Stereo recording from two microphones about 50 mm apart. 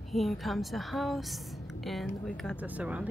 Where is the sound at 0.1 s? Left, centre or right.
Centre.